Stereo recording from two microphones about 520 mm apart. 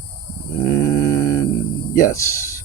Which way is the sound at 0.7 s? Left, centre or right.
Centre.